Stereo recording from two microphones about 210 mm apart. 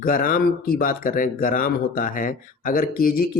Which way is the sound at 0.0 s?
40° left (ahead or behind).